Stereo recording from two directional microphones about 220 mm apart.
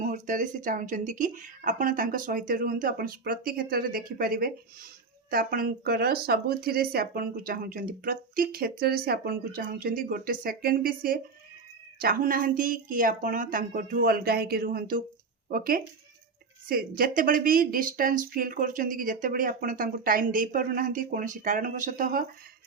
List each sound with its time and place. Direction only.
0.1 s speech: 35° right (ahead or behind)